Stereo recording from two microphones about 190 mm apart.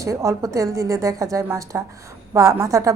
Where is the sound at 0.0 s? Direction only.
15° right (ahead or behind).